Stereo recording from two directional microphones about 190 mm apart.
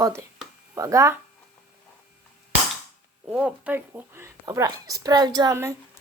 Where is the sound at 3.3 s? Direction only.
5° right (ahead or behind).